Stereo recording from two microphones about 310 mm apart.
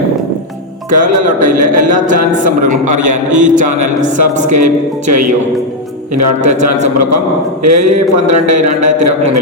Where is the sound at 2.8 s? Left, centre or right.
Right.